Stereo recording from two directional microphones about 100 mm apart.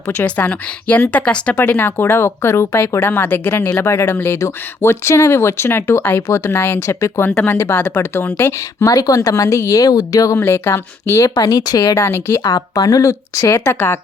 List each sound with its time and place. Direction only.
0.3 s speech: 15° left (ahead or behind)
7.3 s speech: 15° left (ahead or behind)
8.9 s speech: 35° left (ahead or behind)
10.3 s speech: 25° left (ahead or behind)
11.3 s speech: 40° left (ahead or behind)
11.9 s speech: 25° left (ahead or behind)
12.4 s speech: 40° left (ahead or behind)